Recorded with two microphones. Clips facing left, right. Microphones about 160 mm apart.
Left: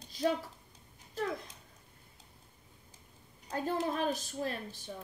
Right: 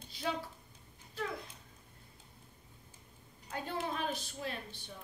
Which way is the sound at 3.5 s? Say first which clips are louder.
Left 5 dB; 40° left (ahead or behind).